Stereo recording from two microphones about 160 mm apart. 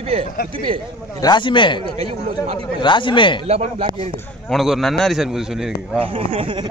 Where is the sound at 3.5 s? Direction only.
40° right (ahead or behind).